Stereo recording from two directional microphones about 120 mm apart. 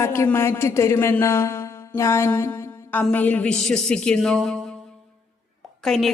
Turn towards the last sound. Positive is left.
turn(degrees=0)  # may be behind; listen again after turning